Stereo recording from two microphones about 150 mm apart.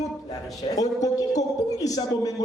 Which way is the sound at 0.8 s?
25° left (ahead or behind).